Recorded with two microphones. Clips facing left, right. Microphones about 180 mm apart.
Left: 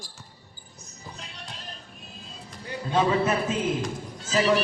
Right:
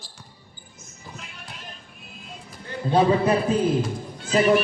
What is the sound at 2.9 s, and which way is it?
Speech, 35° right (ahead or behind).